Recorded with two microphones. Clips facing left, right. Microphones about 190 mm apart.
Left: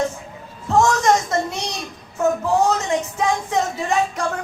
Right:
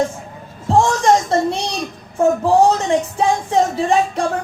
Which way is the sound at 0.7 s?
30° right (ahead or behind).